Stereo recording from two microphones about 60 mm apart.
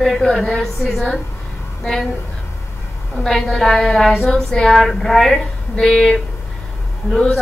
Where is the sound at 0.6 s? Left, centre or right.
Centre.